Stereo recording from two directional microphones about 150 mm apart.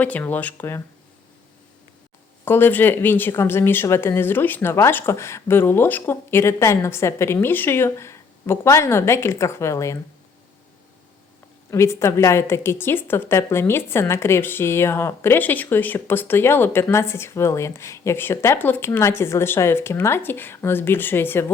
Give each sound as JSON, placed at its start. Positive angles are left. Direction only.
{"t": 0.0, "sound": "a woman's voice", "side_deg": 10}
{"t": 2.4, "sound": "a woman's voice", "side_deg": 15}
{"t": 11.7, "sound": "a woman's voice", "side_deg": 20}